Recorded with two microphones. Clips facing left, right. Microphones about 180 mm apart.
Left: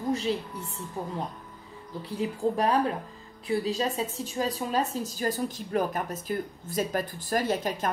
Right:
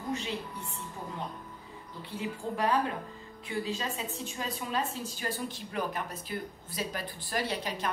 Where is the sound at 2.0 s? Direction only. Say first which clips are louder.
Left 8 dB; 35° left (ahead or behind).